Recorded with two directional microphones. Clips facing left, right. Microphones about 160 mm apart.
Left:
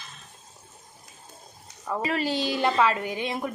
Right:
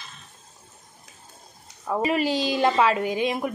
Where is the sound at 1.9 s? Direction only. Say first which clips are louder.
Right 4 dB; 15° right (ahead or behind).